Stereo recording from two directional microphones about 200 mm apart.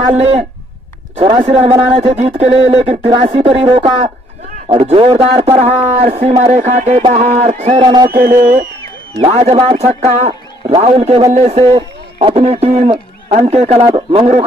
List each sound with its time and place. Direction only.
0.1 s a man's voice: 30° right (ahead or behind)
8.1 s a sound: 50° right (ahead or behind)
9.1 s a man's voice: 30° right (ahead or behind)